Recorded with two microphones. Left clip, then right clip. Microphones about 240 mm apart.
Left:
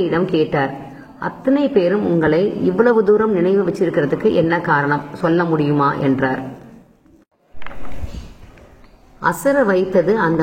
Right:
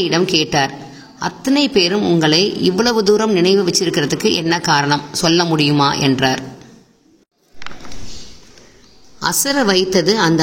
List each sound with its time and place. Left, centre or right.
0.0 s a man's voice: right
9.2 s speech: right